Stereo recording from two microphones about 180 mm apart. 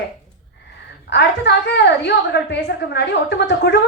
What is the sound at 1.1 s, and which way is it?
A woman's voice, 70° left (ahead or behind).